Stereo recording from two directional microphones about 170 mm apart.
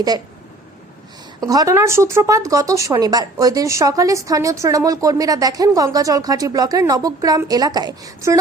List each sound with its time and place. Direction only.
1.4 s speech: 20° right (ahead or behind)